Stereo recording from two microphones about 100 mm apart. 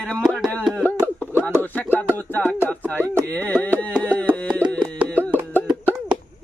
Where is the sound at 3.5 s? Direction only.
20° left (ahead or behind).